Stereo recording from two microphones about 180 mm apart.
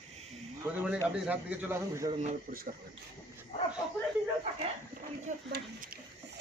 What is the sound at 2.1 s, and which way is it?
Speech, 35° right (ahead or behind).